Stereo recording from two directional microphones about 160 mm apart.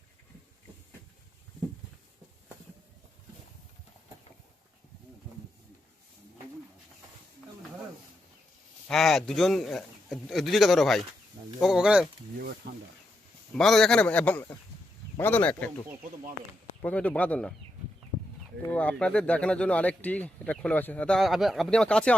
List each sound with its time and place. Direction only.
8.9 s speech: centre (ahead or behind)
12.7 s a sound: 90° right
13.6 s speech: 5° left (ahead or behind)
16.8 s speech: 10° left (ahead or behind)
18.6 s speech: 10° left (ahead or behind)